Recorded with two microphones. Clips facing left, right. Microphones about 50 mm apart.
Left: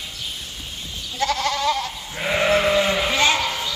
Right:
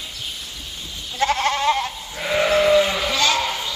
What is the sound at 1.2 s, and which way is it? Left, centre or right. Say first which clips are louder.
Goat: right 2 dB; right.